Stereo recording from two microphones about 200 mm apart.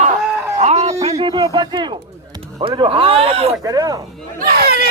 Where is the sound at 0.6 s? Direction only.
35° right (ahead or behind).